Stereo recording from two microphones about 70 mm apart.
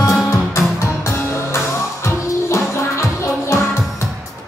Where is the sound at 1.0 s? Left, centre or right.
Left.